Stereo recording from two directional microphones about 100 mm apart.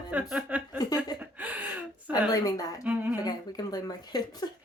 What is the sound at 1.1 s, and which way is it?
Speech, 15° right (ahead or behind).